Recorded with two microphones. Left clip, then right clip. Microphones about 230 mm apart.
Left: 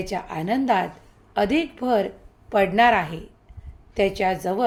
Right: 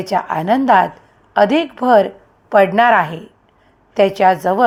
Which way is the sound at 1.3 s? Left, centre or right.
Centre.